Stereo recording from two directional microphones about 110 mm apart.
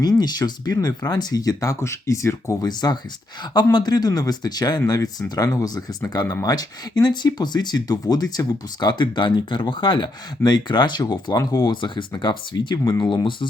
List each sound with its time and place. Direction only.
0.2 s speech: 40° left (ahead or behind)